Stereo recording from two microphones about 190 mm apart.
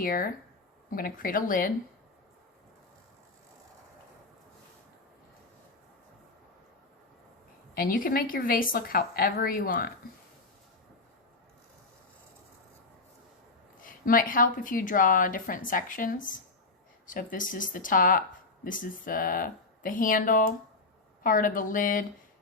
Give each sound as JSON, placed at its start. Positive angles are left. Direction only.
{"t": 0.0, "sound": "a woman's voice", "side_deg": 50}
{"t": 7.8, "sound": "a woman's voice", "side_deg": 50}
{"t": 13.8, "sound": "a woman's voice", "side_deg": 45}